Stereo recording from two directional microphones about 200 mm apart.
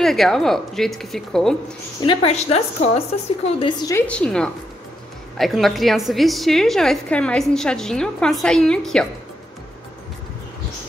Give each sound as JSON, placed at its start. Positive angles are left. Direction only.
{"t": 0.0, "sound": "a woman's voice", "side_deg": 0}
{"t": 2.0, "sound": "a woman's voice", "side_deg": 25}
{"t": 4.1, "sound": "a woman's voice", "side_deg": 5}